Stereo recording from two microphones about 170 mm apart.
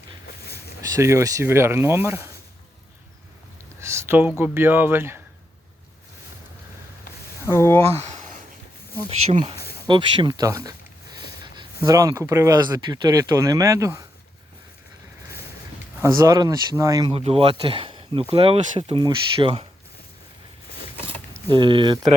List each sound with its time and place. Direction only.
0.9 s speech: 15° right (ahead or behind)
3.8 s speech: 15° right (ahead or behind)
7.4 s speech: 15° left (ahead or behind)
7.9 s a sound: 40° right (ahead or behind)
9.0 s speech: 35° right (ahead or behind)
9.6 s a sound: 70° left (ahead or behind)
9.8 s speech: 25° right (ahead or behind)
11.8 s speech: 20° right (ahead or behind)
16.0 s speech: 15° right (ahead or behind)
17.1 s speech: 35° right (ahead or behind)
21.5 s speech: 30° right (ahead or behind)